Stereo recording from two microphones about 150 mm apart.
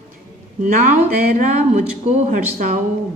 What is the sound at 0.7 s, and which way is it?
Speech, 60° right (ahead or behind).